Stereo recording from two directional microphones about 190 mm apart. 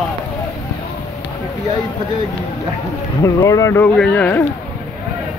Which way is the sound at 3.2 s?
15° left (ahead or behind).